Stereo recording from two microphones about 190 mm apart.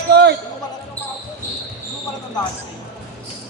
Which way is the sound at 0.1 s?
60° right (ahead or behind).